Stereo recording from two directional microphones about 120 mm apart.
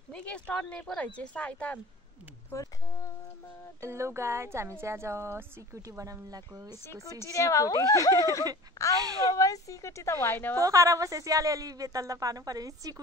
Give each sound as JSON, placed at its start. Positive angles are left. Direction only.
{"t": 0.1, "sound": "speech", "side_deg": 10}
{"t": 2.5, "sound": "a sound", "side_deg": 25}
{"t": 3.8, "sound": "a woman's voice", "side_deg": -20}
{"t": 6.8, "sound": "speech", "side_deg": 25}
{"t": 8.9, "sound": "speech", "side_deg": -30}
{"t": 9.3, "sound": "speech", "side_deg": 30}
{"t": 10.6, "sound": "a woman's voice", "side_deg": -25}